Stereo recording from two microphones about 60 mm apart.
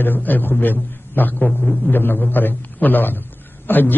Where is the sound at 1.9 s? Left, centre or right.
Left.